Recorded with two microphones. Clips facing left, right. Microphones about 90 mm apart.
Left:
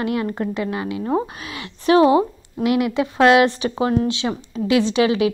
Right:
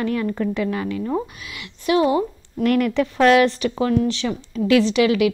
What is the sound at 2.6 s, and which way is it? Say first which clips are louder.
Speech: even; 15° left (ahead or behind).